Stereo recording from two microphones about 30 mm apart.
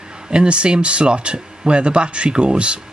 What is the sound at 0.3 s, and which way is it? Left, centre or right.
Speech, right.